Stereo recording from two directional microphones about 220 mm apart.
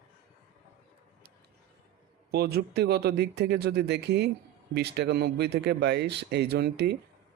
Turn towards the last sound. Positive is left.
turn(degrees=-50)  # may be behind; listen again after turning